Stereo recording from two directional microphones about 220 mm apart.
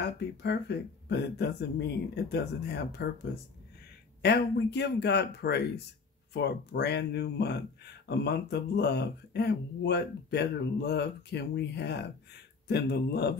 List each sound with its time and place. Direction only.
0.4 s speech: 50° left (ahead or behind)
4.2 s speech: 50° left (ahead or behind)